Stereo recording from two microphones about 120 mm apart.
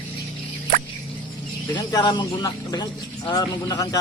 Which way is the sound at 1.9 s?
35° left (ahead or behind).